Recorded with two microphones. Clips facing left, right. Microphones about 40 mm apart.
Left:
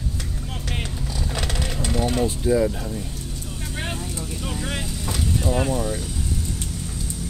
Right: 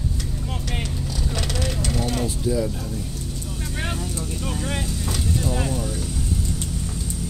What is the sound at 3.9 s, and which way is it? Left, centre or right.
Speech, left.